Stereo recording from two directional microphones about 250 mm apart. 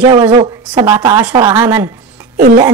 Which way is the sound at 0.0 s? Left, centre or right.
Centre.